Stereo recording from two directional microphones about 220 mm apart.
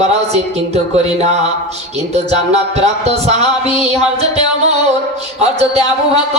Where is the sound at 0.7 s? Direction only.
30° right (ahead or behind).